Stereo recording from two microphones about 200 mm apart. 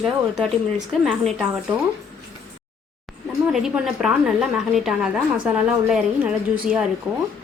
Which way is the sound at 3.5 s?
Centre (ahead or behind).